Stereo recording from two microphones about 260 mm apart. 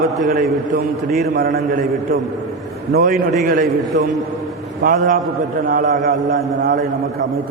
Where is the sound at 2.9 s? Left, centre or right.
Right.